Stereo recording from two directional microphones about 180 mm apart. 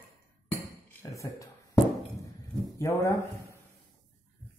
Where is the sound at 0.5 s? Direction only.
15° left (ahead or behind).